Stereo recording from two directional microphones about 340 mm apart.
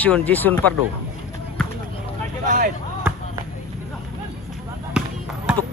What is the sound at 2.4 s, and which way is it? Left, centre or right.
Vehicle, right.